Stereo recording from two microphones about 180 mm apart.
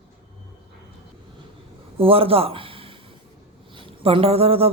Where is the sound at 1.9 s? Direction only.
30° right (ahead or behind).